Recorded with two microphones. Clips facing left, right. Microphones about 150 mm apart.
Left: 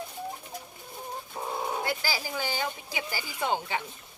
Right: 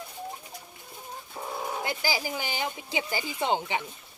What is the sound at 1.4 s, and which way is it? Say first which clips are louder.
Bird: left 1 dB; 20° left (ahead or behind).